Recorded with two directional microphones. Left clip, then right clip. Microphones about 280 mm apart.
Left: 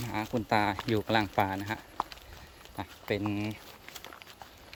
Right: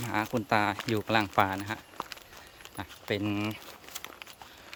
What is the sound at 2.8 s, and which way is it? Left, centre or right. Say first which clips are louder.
Speech: even; centre.